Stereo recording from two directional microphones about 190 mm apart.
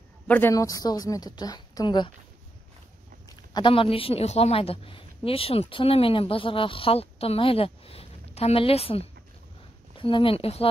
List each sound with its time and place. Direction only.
0.3 s a woman's voice: 15° left (ahead or behind)
3.5 s a woman's voice: 25° left (ahead or behind)